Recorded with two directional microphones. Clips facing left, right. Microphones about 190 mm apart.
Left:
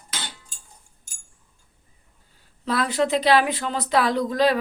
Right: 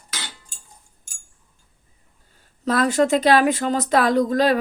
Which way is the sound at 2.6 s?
45° right (ahead or behind).